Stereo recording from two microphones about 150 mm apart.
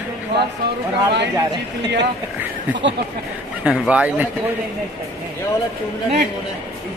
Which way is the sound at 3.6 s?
5° right (ahead or behind).